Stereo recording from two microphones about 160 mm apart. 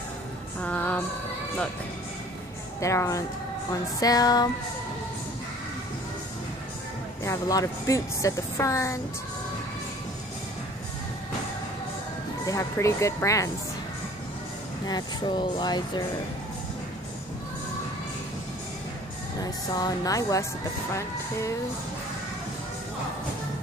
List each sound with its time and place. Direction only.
0.6 s a sound: 10° left (ahead or behind)
2.8 s speech: 20° left (ahead or behind)
7.2 s speech: 20° left (ahead or behind)
12.4 s speech: 20° left (ahead or behind)
14.9 s speech: 25° left (ahead or behind)
19.4 s speech: 25° left (ahead or behind)
20.9 s music: 20° left (ahead or behind)